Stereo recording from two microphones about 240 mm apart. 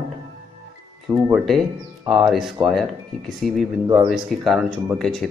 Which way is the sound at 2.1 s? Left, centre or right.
Centre.